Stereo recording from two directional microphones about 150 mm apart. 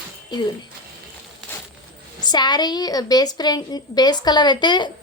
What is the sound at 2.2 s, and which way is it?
A woman's voice, 30° left (ahead or behind).